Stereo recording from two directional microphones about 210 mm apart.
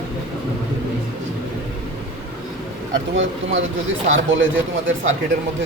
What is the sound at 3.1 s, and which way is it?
Speech, 65° right (ahead or behind).